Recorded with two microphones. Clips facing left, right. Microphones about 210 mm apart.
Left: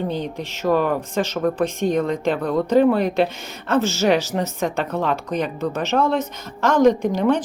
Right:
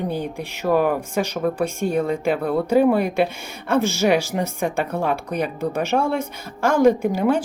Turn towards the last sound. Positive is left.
turn(degrees=-10)  # may be behind; listen again after turning